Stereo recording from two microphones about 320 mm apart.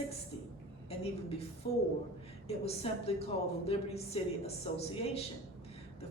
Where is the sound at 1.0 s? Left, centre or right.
Centre.